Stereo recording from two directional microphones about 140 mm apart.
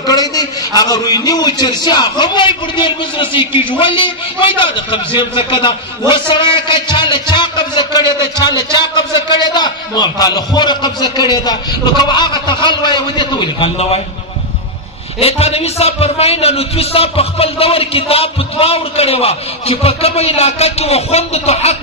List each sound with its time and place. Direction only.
0.0 s a man's voice: 25° left (ahead or behind); by 14.0 s 45° left (ahead or behind)
15.1 s a man's voice: 45° left (ahead or behind)